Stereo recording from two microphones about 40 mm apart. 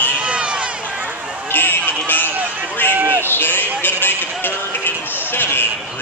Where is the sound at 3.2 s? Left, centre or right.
Left.